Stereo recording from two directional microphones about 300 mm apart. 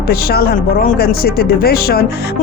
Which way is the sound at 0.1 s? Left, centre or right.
Left.